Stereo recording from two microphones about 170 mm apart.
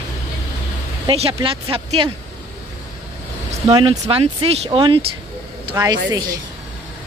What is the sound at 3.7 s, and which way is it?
Speech, 30° right (ahead or behind).